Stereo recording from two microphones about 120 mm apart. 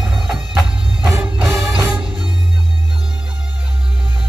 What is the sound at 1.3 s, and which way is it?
Music, 5° right (ahead or behind).